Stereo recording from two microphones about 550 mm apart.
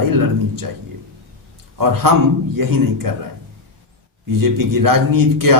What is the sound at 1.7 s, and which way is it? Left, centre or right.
A man's voice, right.